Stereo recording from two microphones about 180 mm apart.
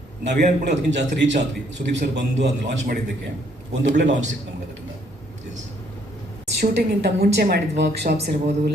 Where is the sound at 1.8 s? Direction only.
50° right (ahead or behind).